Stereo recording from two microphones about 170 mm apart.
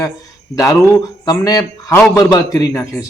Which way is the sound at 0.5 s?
20° left (ahead or behind).